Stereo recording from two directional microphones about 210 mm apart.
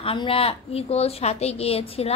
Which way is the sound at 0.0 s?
25° left (ahead or behind).